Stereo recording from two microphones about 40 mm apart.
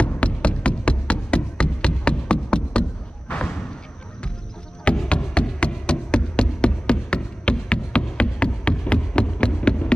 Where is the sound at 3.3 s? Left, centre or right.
Left.